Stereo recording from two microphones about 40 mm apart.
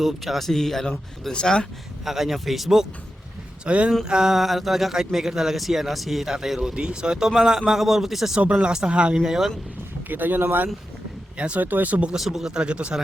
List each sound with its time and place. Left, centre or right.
0.0 s speech: centre
1.3 s speech: left
2.0 s speech: centre
3.7 s a man's voice: right
4.0 s a man's voice: centre
4.4 s a man's voice: centre
7.8 s a man's voice: centre
8.4 s a man's voice: right
9.1 s speech: centre
10.1 s speech: right
11.3 s speech: right
11.6 s speech: right
12.1 s speech: centre
12.5 s a man's voice: right